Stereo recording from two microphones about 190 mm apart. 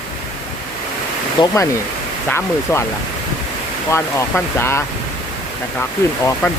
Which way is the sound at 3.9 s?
15° left (ahead or behind).